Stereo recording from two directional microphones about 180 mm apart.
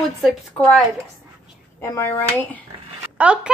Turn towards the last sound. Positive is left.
turn(degrees=-5)  # may be behind; listen again after turning